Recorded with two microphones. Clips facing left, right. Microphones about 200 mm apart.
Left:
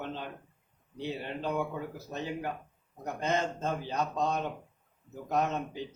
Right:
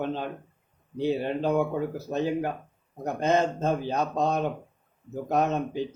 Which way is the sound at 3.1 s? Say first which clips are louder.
Right 7 dB; 50° right (ahead or behind).